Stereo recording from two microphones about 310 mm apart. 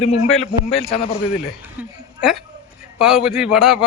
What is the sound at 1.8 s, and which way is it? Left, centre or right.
Speech, centre.